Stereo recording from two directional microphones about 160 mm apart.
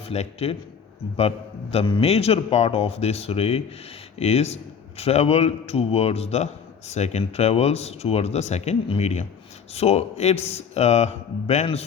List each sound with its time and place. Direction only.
0.1 s a man's voice: 40° left (ahead or behind)
1.7 s a man's voice: 35° left (ahead or behind)